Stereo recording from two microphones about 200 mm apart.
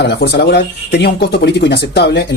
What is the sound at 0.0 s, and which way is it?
Speech, 55° left (ahead or behind).